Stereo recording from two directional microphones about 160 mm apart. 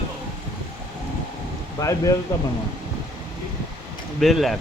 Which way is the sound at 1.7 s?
20° left (ahead or behind).